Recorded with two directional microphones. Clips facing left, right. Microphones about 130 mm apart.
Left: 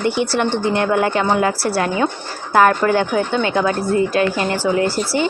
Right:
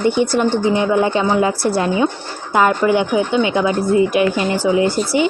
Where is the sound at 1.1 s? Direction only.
20° right (ahead or behind).